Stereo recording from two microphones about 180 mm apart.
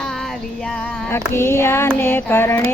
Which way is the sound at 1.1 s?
15° left (ahead or behind).